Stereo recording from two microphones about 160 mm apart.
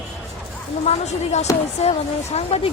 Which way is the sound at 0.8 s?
45° left (ahead or behind).